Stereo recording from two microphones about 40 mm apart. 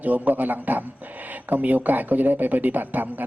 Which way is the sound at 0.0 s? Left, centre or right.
Right.